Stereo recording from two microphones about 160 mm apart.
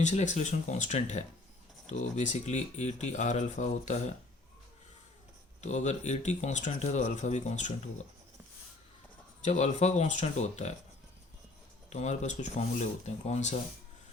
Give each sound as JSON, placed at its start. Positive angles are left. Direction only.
{"t": 0.0, "sound": "speech", "side_deg": 50}
{"t": 5.5, "sound": "speech", "side_deg": 45}
{"t": 9.4, "sound": "speech", "side_deg": 45}
{"t": 11.9, "sound": "speech", "side_deg": 45}